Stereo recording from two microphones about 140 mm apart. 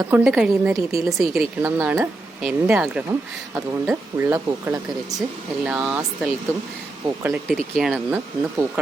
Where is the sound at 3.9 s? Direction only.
20° right (ahead or behind).